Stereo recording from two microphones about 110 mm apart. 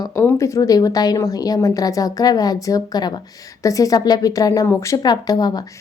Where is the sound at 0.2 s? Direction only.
25° left (ahead or behind).